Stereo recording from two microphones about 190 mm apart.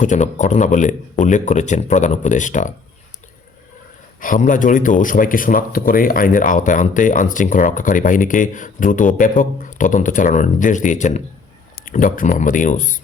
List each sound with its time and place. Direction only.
0.0 s speech: 40° left (ahead or behind)
4.2 s speech: 45° left (ahead or behind)